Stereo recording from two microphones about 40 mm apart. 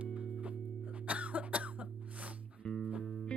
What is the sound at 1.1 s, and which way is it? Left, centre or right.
Cough, right.